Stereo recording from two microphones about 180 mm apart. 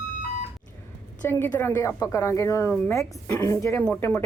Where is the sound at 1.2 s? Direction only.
10° left (ahead or behind).